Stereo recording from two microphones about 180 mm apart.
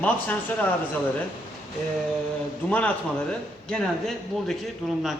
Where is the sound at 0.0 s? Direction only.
10° left (ahead or behind).